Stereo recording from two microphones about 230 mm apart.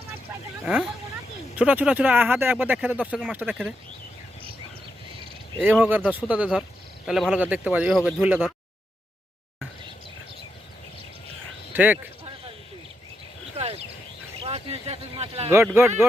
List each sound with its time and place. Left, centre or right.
0.6 s speech: centre
5.6 s speech: centre
11.7 s speech: centre
13.6 s a sound: right
14.4 s speech: right
15.4 s speech: centre